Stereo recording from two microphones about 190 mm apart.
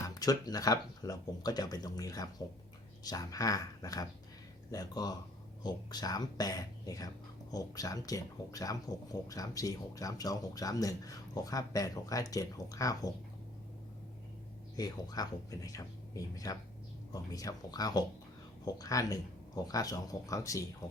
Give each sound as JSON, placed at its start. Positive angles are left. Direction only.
{"t": 0.1, "sound": "speech", "side_deg": 20}
{"t": 14.8, "sound": "speech", "side_deg": 20}